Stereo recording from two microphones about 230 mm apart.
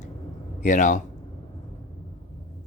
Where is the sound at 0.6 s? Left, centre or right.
Left.